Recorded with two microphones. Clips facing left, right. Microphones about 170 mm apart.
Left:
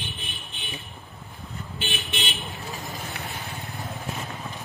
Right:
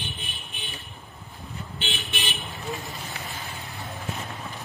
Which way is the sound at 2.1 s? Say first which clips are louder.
Left 1 dB; 20° left (ahead or behind).